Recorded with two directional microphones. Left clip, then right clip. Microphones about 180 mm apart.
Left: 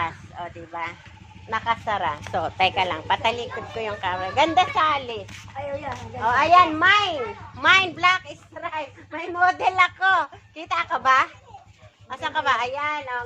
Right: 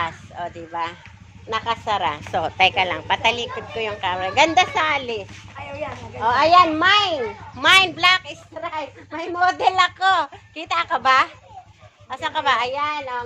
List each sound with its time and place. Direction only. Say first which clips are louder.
0.0 s a sound: right 2 dB; 35° right (ahead or behind)
1.5 s a child's voice: right 2 dB; 35° right (ahead or behind)
2.3 s a woman's voice: right 4 dB; 20° right (ahead or behind)